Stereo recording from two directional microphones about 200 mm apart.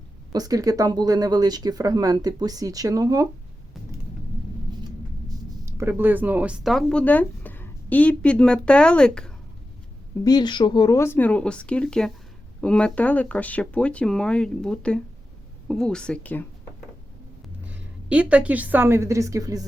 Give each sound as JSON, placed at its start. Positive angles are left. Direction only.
{"t": 0.3, "sound": "speech", "side_deg": -20}
{"t": 5.6, "sound": "speech", "side_deg": -15}
{"t": 10.2, "sound": "speech", "side_deg": 20}
{"t": 17.7, "sound": "a woman's voice", "side_deg": -5}